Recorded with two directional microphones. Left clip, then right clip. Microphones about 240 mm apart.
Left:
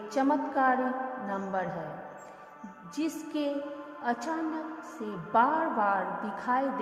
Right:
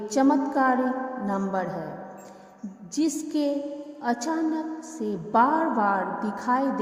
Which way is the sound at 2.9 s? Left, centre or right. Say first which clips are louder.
Right 7 dB; right.